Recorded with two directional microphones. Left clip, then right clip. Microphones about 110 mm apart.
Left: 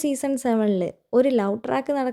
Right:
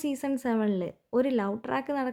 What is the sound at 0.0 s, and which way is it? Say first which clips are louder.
Speech: left 7 dB; 40° left (ahead or behind).